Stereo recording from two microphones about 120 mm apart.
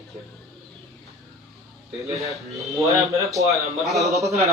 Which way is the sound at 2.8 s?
25° right (ahead or behind).